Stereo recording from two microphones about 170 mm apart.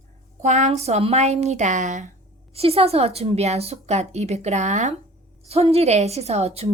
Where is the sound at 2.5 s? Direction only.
35° right (ahead or behind).